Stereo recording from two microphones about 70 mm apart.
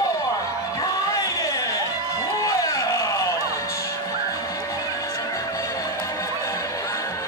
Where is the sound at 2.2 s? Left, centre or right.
Left.